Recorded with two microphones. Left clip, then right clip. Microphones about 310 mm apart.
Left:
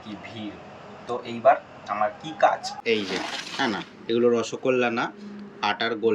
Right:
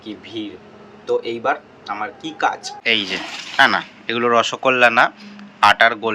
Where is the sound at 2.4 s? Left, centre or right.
Centre.